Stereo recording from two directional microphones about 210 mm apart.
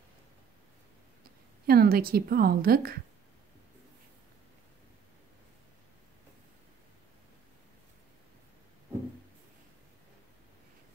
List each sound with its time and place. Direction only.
1.7 s a woman's voice: 45° right (ahead or behind)